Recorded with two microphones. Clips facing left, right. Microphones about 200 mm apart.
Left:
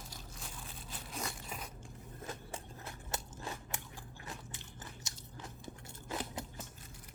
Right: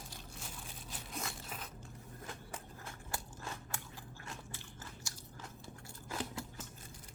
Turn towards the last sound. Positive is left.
turn(degrees=20)  # may be behind; listen again after turning